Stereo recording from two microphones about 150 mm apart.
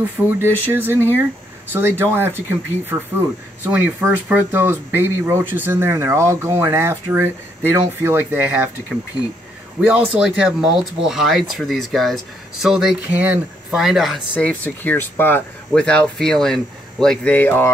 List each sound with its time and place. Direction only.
0.4 s speech: 15° right (ahead or behind)
3.6 s speech: 10° right (ahead or behind)
9.8 s speech: 10° right (ahead or behind)
14.3 s speech: 10° left (ahead or behind)